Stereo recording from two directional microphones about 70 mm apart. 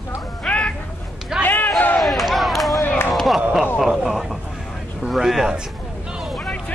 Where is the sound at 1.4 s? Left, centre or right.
Left.